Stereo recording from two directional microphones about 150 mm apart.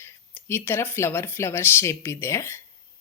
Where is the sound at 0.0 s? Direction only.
15° left (ahead or behind).